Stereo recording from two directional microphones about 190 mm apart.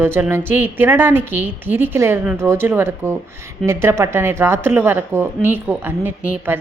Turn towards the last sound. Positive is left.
turn(degrees=-10)  # may be behind; listen again after turning